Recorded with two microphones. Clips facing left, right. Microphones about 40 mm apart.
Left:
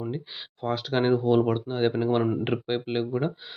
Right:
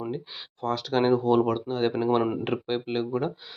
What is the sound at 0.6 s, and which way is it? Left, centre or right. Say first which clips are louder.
Speech: right 1 dB; centre.